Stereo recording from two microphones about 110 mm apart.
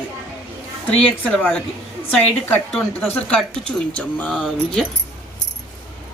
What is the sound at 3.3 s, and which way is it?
Speech, 10° left (ahead or behind).